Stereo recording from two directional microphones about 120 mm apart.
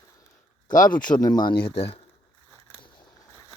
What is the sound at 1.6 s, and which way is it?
Speech, 50° left (ahead or behind).